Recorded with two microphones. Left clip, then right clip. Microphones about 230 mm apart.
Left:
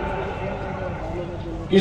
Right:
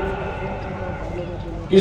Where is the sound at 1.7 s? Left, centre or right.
Right.